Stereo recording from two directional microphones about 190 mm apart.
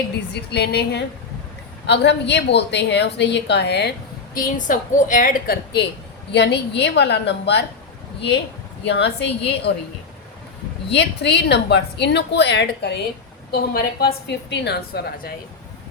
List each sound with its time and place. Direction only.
0.3 s a woman's voice: 60° left (ahead or behind)
4.4 s a woman's voice: 45° left (ahead or behind)
6.3 s a woman's voice: 65° left (ahead or behind)
8.9 s a woman's voice: 65° left (ahead or behind)
10.8 s a woman's voice: 65° left (ahead or behind)
13.5 s a woman's voice: 55° left (ahead or behind)